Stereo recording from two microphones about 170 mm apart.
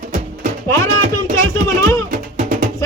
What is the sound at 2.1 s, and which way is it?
Music, 55° right (ahead or behind).